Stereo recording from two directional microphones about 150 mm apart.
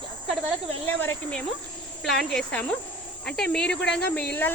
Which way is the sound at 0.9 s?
10° left (ahead or behind).